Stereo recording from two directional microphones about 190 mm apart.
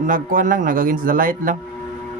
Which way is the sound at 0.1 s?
45° right (ahead or behind).